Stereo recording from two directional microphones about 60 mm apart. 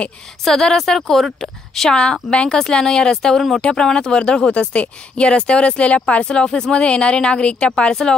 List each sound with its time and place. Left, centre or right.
0.5 s speech: centre